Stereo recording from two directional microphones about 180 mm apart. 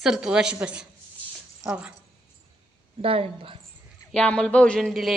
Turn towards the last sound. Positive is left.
turn(degrees=0)  # may be behind; listen again after turning